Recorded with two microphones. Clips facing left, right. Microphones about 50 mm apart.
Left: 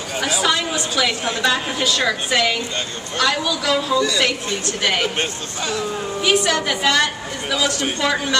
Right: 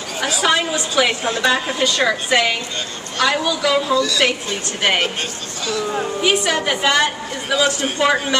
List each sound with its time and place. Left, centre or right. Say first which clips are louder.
0.5 s a sound: right 2 dB; centre
1.4 s a woman's voice: right 2 dB; centre
3.9 s a woman's voice: right 1 dB; centre
4.2 s a woman's voice: right 2 dB; right
6.2 s a woman's voice: left 1 dB; centre